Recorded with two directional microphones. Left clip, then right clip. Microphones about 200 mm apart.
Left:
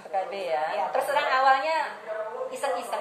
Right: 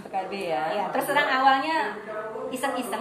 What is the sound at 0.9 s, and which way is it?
A woman's voice, 15° right (ahead or behind).